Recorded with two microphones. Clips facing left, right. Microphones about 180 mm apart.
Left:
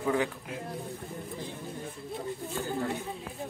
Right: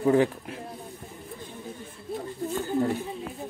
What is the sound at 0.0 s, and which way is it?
Speech, 35° right (ahead or behind).